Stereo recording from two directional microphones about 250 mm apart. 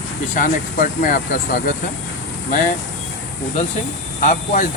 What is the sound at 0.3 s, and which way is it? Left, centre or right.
Speech, left.